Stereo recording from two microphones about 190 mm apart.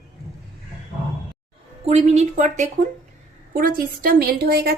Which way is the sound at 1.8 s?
35° right (ahead or behind).